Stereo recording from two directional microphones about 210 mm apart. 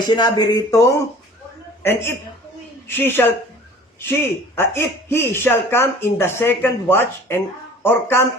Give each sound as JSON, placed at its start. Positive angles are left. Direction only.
{"t": 0.0, "sound": "speech", "side_deg": 20}